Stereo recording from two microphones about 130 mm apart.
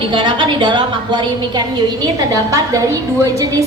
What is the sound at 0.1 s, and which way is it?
A woman's voice, 40° right (ahead or behind).